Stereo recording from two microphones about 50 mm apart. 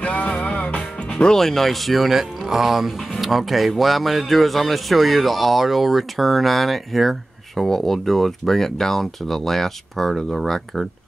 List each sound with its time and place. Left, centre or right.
0.0 s music: left
1.2 s speech: centre